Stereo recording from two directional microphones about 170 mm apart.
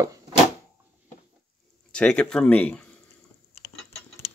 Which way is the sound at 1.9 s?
5° left (ahead or behind).